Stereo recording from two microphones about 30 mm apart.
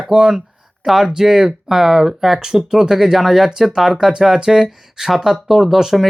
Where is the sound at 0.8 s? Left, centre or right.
Centre.